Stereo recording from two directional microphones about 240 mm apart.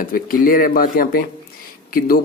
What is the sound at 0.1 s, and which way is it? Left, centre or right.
A man's voice, left.